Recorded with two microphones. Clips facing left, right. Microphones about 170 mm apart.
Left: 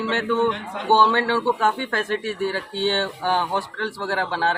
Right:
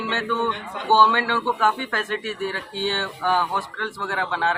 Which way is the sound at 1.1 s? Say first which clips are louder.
Left 3 dB; 30° left (ahead or behind).